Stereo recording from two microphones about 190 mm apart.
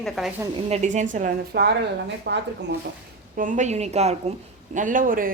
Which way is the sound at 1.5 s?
60° right (ahead or behind).